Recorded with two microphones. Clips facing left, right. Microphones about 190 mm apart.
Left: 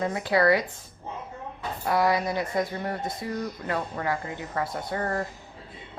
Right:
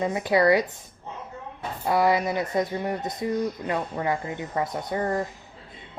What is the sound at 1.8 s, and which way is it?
A woman's voice, 20° right (ahead or behind).